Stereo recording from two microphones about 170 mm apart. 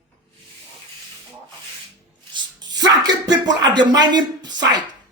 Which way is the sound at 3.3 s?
25° right (ahead or behind).